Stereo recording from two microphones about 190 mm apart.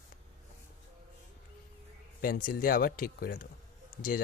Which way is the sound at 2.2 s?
50° left (ahead or behind).